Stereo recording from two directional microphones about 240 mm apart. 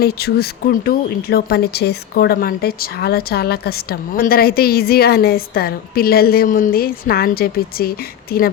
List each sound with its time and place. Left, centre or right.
0.0 s speech: left